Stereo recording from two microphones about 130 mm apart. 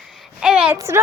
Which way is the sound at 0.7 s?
20° right (ahead or behind).